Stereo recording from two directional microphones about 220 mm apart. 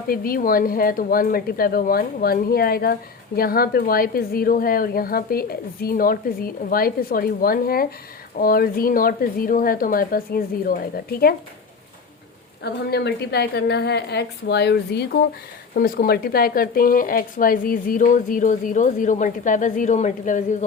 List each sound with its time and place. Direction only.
0.1 s speech: 40° left (ahead or behind)
12.6 s a woman's voice: 50° left (ahead or behind)